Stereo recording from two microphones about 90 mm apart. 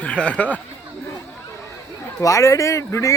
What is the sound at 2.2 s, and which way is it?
Speech, 35° left (ahead or behind).